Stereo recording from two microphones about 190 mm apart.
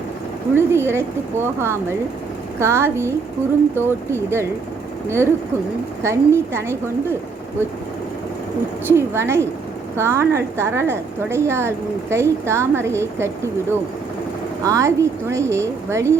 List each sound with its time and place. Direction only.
0.5 s a woman's voice: 15° right (ahead or behind)
8.9 s a woman's voice: 15° right (ahead or behind)